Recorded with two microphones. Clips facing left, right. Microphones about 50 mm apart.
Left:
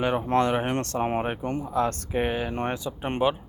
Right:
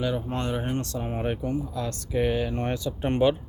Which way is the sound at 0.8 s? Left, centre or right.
Left.